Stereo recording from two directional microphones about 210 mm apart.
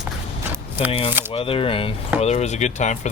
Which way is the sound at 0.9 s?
25° left (ahead or behind).